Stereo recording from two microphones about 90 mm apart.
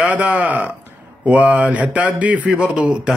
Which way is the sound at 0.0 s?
15° right (ahead or behind).